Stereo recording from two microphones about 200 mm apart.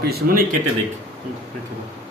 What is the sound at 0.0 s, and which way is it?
Speech, 50° right (ahead or behind).